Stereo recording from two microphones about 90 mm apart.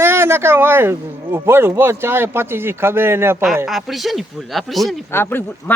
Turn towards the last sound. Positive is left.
turn(degrees=25)  # may be behind; listen again after turning